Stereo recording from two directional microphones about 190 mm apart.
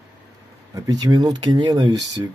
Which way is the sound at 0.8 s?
20° right (ahead or behind).